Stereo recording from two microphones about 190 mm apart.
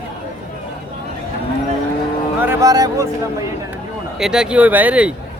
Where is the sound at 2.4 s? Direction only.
15° right (ahead or behind).